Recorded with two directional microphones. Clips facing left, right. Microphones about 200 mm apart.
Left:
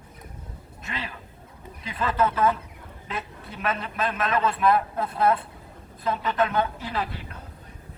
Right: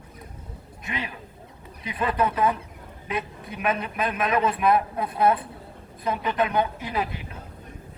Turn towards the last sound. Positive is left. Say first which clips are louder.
# right 1 dB
turn(degrees=-15)  # may be behind; listen again after turning